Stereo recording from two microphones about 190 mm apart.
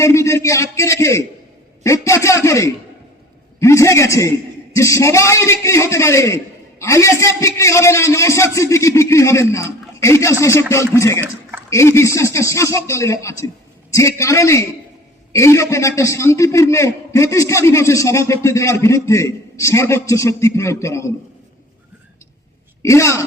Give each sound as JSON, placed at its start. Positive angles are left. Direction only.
{"t": 0.0, "sound": "a man's voice", "side_deg": 15}
{"t": 22.8, "sound": "a man's voice", "side_deg": 15}